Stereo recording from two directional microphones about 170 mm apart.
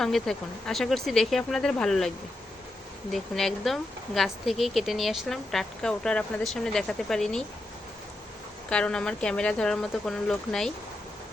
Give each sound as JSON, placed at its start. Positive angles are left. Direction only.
{"t": 0.0, "sound": "speech", "side_deg": 5}
{"t": 8.7, "sound": "speech", "side_deg": 5}